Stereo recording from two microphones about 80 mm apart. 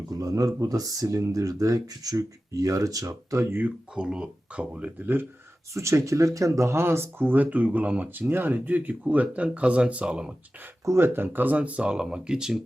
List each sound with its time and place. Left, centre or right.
0.1 s speech: right
3.9 s speech: centre
5.7 s speech: right; by 10.3 s centre
10.8 s speech: right; by 12.5 s centre